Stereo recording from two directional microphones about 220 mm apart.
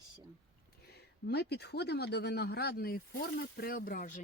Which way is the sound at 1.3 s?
50° left (ahead or behind).